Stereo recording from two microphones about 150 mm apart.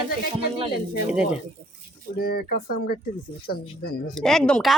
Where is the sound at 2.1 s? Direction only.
90° left.